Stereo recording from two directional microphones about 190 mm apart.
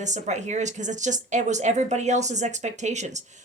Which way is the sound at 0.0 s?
40° right (ahead or behind).